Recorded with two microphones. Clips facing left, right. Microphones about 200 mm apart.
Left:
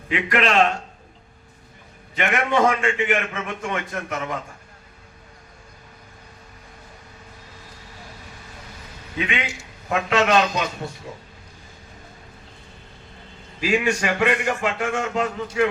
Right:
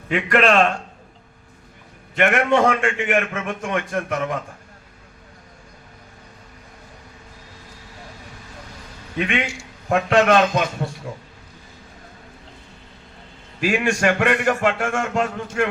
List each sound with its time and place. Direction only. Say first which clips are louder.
0.1 s a man's voice: right 4 dB; 45° right (ahead or behind)
2.1 s a man's voice: right 4 dB; 50° right (ahead or behind)
9.1 s a man's voice: right 4 dB; 55° right (ahead or behind)
13.6 s a man's voice: right 1 dB; 50° right (ahead or behind)